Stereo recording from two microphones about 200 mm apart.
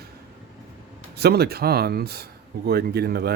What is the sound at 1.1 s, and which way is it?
Speech, 55° right (ahead or behind).